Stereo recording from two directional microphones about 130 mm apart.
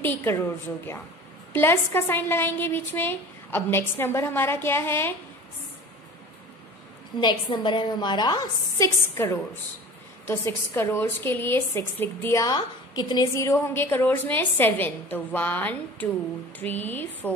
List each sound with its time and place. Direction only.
0.0 s a woman's voice: 15° left (ahead or behind)
7.2 s a woman's voice: 35° left (ahead or behind)
12.5 s a woman's voice: 30° left (ahead or behind); by 17.3 s 15° left (ahead or behind)